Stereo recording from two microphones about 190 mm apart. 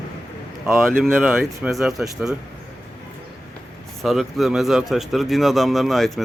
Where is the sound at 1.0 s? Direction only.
5° right (ahead or behind).